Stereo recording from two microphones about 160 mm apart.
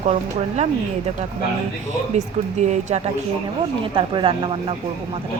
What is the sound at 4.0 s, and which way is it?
Speech, 30° right (ahead or behind).